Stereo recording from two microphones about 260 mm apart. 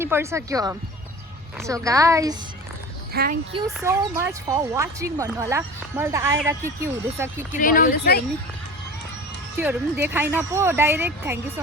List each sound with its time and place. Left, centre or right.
0.0 s speech: centre
3.1 s a child's voice: right
3.8 s speech: centre
7.6 s speech: left
9.6 s speech: centre